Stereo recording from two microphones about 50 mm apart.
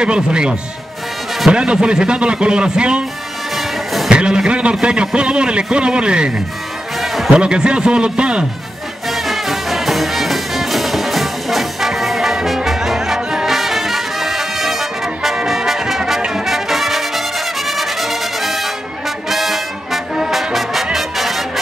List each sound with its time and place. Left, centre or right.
0.0 s speech: centre
3.5 s music: centre
4.1 s a man's voice: centre
7.0 s music: centre
7.3 s speech: centre
9.1 s music: centre